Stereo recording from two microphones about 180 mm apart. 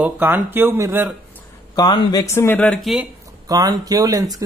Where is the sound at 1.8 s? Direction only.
25° left (ahead or behind).